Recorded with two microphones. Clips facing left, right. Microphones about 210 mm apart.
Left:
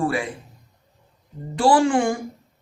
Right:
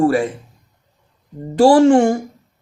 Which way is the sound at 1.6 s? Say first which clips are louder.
Right 8 dB; 45° right (ahead or behind).